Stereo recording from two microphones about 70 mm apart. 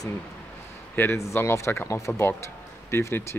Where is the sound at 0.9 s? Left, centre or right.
Left.